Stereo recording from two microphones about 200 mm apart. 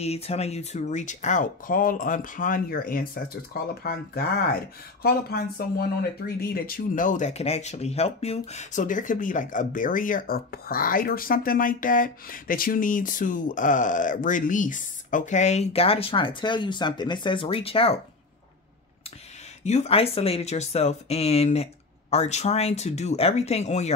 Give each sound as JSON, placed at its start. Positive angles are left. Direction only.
{"t": 0.0, "sound": "speech", "side_deg": 30}
{"t": 19.6, "sound": "speech", "side_deg": 35}